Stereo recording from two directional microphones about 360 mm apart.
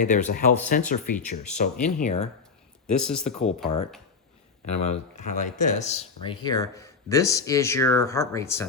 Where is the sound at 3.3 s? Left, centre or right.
Centre.